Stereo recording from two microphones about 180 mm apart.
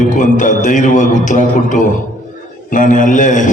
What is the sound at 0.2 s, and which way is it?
A man's voice, 45° left (ahead or behind).